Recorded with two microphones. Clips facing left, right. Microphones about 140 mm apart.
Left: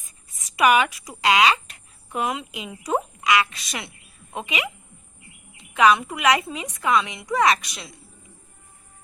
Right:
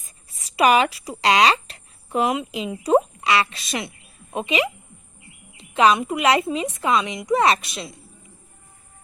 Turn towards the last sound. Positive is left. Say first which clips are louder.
# right 1 dB
turn(degrees=-25)  # may be behind; listen again after turning